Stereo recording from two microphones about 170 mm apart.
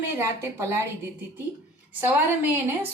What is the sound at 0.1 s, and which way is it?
Speech, 15° right (ahead or behind).